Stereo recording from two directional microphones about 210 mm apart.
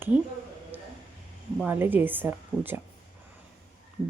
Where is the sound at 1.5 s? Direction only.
10° right (ahead or behind).